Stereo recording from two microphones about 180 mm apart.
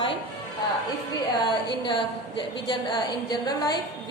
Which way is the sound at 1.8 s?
25° left (ahead or behind).